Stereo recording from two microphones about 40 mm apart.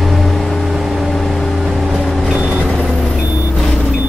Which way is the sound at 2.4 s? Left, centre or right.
Right.